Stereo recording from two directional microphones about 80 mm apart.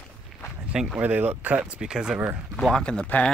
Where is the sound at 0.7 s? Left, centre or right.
Centre.